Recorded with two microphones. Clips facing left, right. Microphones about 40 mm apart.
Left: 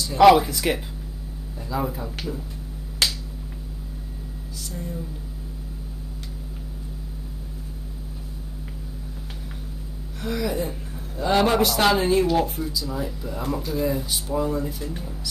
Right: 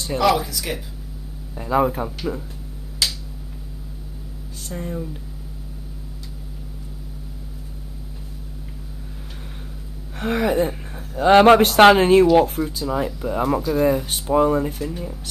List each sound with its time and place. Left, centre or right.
0.2 s speech: left
1.5 s speech: right
4.6 s speech: right
10.1 s speech: right